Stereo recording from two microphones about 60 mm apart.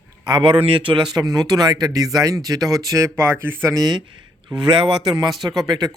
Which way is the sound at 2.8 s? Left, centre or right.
Right.